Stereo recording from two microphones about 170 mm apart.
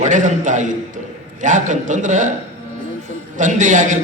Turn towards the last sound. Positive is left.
turn(degrees=-45)  # may be behind; listen again after turning